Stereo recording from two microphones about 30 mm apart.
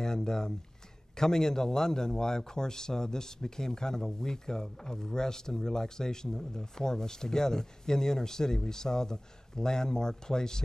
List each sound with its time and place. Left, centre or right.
0.0 s a man's voice: left